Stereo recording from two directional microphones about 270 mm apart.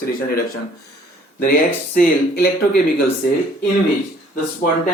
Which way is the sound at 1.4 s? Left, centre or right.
Left.